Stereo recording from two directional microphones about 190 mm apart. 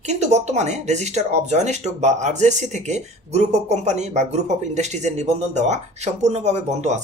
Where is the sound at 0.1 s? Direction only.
35° right (ahead or behind).